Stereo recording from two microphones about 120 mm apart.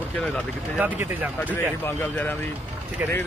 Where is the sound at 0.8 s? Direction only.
15° right (ahead or behind).